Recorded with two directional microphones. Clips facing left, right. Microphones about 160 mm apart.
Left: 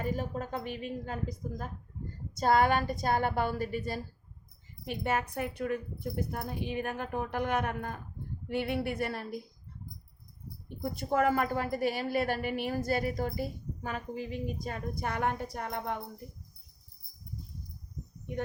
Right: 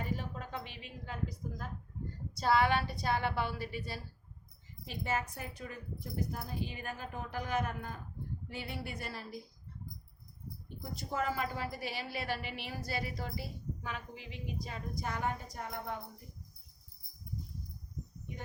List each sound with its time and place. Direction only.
0.0 s a woman's voice: 45° left (ahead or behind)
4.9 s speech: 60° left (ahead or behind)
10.9 s a woman's voice: 55° left (ahead or behind)